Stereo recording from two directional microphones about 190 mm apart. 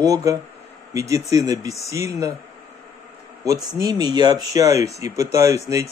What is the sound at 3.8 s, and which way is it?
Speech, 20° right (ahead or behind).